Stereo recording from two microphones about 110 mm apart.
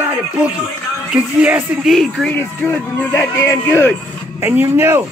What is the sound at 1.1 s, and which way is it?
Speech, 15° right (ahead or behind).